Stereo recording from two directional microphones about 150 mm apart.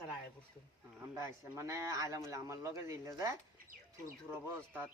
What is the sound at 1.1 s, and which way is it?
Speech, 20° right (ahead or behind).